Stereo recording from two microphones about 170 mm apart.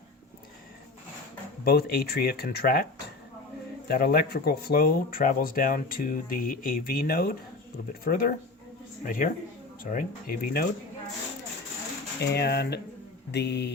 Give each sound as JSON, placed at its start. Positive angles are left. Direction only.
{"t": 1.6, "sound": "speech", "side_deg": 65}
{"t": 3.8, "sound": "speech", "side_deg": 65}
{"t": 12.2, "sound": "speech", "side_deg": 75}
{"t": 13.3, "sound": "music", "side_deg": 85}